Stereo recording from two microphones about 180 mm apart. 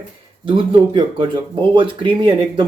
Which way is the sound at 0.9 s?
25° right (ahead or behind).